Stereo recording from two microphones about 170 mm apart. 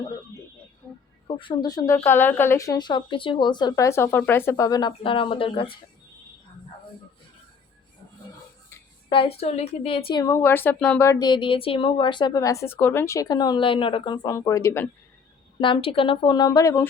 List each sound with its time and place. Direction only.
1.4 s a woman's voice: 25° left (ahead or behind)
9.1 s a woman's voice: 35° left (ahead or behind); by 14.8 s 15° left (ahead or behind)
15.6 s a woman's voice: 30° left (ahead or behind)